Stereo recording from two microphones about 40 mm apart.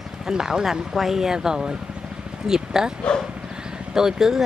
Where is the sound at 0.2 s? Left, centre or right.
Centre.